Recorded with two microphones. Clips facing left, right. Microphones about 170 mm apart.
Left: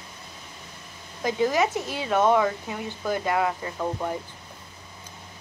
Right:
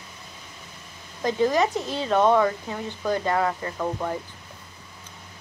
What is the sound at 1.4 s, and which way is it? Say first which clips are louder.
Speech: right 1 dB; 5° left (ahead or behind).